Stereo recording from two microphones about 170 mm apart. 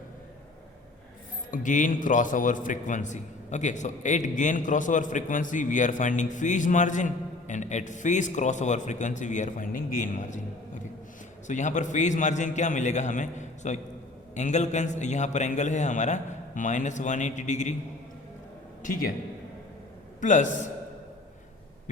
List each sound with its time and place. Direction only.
1.5 s a man's voice: 50° left (ahead or behind)
11.4 s a man's voice: 45° left (ahead or behind)
18.8 s a man's voice: 55° left (ahead or behind)
20.2 s a man's voice: 45° left (ahead or behind)